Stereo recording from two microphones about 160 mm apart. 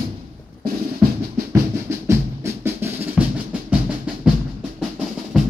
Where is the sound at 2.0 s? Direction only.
15° right (ahead or behind).